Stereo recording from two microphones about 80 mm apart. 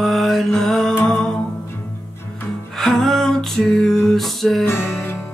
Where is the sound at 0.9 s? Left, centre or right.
Left.